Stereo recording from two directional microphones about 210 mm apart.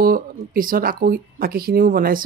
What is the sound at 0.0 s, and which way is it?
Speech, 45° right (ahead or behind).